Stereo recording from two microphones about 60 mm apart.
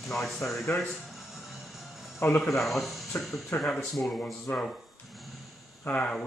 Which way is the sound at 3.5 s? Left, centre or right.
Left.